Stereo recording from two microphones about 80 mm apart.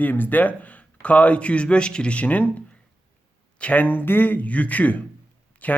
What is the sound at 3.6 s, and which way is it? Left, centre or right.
Speech, centre.